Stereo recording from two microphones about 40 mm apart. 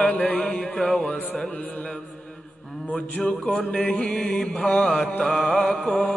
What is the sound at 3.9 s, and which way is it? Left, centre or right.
Mantra, centre.